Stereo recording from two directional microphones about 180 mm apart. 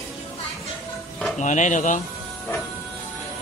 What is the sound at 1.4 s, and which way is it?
Speech, 45° left (ahead or behind).